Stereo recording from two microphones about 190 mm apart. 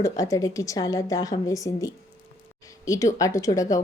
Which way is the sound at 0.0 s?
20° left (ahead or behind).